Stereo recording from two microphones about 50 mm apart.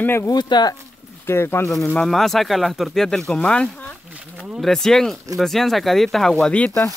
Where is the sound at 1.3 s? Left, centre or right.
Left.